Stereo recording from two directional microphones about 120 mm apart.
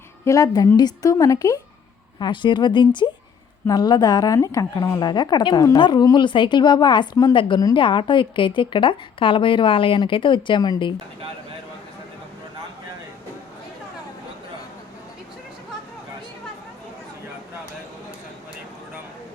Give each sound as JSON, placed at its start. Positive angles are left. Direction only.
{"t": 0.3, "sound": "a woman's voice", "side_deg": 30}
{"t": 2.1, "sound": "a woman's voice", "side_deg": 40}